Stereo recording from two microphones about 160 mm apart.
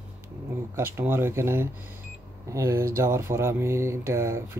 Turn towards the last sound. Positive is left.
turn(degrees=-15)  # may be behind; listen again after turning